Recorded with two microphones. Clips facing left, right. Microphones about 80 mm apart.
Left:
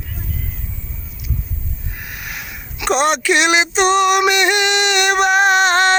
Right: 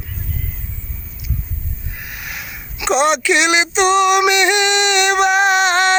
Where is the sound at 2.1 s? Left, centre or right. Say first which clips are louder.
Even; left.